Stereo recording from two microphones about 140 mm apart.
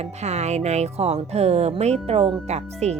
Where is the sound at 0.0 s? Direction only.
50° right (ahead or behind).